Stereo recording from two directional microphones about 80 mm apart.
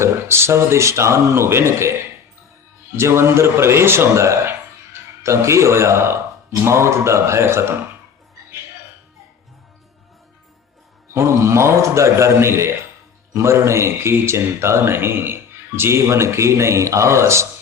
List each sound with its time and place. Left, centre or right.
0.0 s a man's voice: right
2.9 s a man's voice: right
11.1 s a man's voice: right